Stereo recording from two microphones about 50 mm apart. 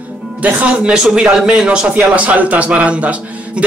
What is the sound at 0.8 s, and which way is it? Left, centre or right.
Speech, centre.